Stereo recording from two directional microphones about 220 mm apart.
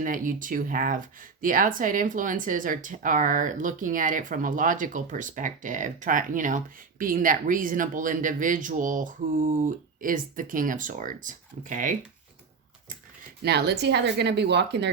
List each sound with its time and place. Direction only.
0.0 s speech: 35° right (ahead or behind)
13.4 s speech: 50° right (ahead or behind)